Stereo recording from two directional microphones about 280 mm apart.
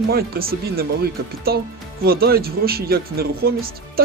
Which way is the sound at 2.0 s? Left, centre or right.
Right.